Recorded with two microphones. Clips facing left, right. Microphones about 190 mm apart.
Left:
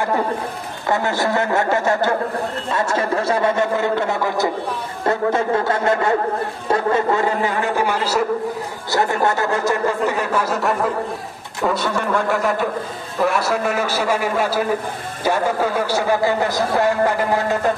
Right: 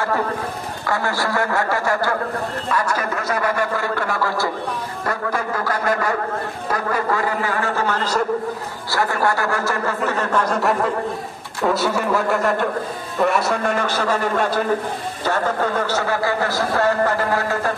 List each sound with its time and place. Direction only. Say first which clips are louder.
0.8 s speech: left 3 dB; 20° left (ahead or behind)
8.9 s a man's voice: left 2 dB; 20° left (ahead or behind); by 10.9 s centre (ahead or behind)
11.6 s a sound: right 1 dB; 5° right (ahead or behind)
13.2 s a man's voice: even; centre (ahead or behind); by 17.7 s 20° left (ahead or behind)